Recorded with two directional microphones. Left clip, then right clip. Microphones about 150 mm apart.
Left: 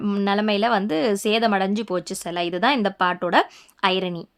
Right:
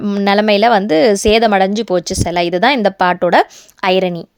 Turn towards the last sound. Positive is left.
turn(degrees=-40)  # may be behind; listen again after turning